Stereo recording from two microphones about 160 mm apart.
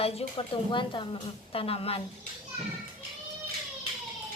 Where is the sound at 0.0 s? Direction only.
40° left (ahead or behind).